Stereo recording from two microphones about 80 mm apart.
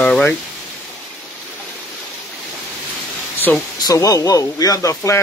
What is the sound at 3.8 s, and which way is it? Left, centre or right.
Speech, left.